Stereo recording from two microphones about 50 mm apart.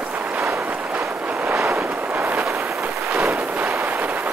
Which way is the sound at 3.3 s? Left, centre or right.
Right.